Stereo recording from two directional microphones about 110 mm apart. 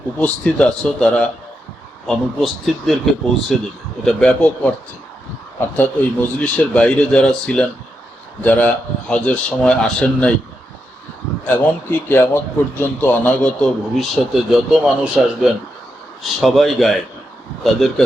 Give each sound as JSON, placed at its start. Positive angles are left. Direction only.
{"t": 0.2, "sound": "a man's voice", "side_deg": 10}
{"t": 11.4, "sound": "speech", "side_deg": 20}
{"t": 14.5, "sound": "speech", "side_deg": -10}